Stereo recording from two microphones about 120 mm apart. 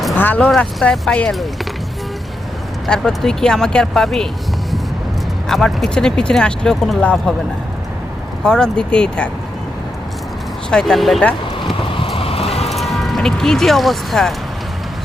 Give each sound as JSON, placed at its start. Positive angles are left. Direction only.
{"t": 0.2, "sound": "speech", "side_deg": 10}
{"t": 2.8, "sound": "speech", "side_deg": 0}
{"t": 5.5, "sound": "speech", "side_deg": 0}
{"t": 8.4, "sound": "speech", "side_deg": 5}
{"t": 10.7, "sound": "speech", "side_deg": 5}
{"t": 11.9, "sound": "music", "side_deg": 50}
{"t": 12.7, "sound": "speech", "side_deg": 0}